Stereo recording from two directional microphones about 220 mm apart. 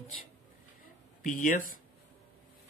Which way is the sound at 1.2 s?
35° left (ahead or behind).